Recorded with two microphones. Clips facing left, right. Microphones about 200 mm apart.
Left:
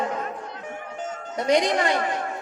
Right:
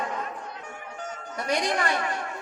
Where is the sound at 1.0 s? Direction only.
20° left (ahead or behind).